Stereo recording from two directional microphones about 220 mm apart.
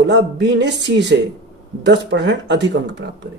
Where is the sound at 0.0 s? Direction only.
50° right (ahead or behind).